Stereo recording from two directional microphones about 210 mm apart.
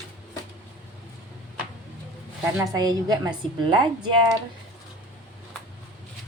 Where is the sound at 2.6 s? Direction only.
20° right (ahead or behind).